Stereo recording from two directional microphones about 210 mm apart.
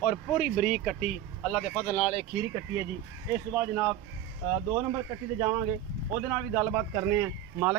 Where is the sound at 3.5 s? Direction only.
10° right (ahead or behind).